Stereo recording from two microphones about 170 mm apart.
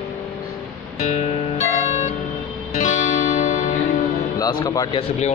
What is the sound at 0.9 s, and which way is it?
Music, 40° left (ahead or behind).